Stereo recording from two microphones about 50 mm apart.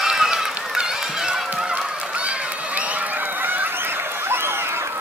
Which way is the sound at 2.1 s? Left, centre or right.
Right.